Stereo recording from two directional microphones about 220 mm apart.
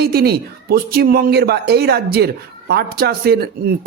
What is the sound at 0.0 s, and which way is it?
Speech, 45° right (ahead or behind).